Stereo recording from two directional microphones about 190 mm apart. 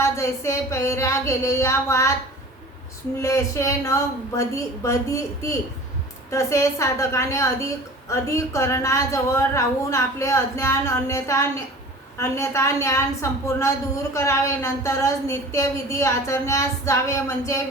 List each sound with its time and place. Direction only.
0.0 s speech: 15° left (ahead or behind)
3.2 s speech: 15° left (ahead or behind)